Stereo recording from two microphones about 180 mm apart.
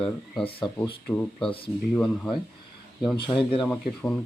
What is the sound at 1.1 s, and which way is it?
Speech, 5° left (ahead or behind).